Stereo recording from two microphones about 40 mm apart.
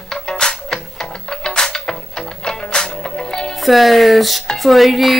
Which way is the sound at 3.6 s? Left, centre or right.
Centre.